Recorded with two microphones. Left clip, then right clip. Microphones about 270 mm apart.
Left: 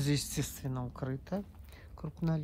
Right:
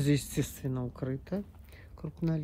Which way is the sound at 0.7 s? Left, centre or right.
Centre.